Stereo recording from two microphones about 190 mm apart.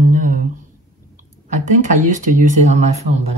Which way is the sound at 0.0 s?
40° right (ahead or behind).